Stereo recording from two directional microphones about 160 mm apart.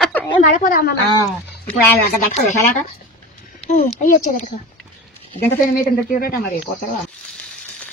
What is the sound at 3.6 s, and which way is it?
Speech, 40° left (ahead or behind).